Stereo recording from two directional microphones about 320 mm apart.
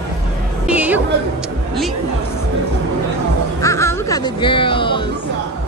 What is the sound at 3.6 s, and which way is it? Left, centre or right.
Speech, centre.